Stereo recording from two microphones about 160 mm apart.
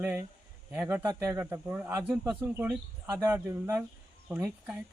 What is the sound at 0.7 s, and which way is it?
Speech, 10° right (ahead or behind).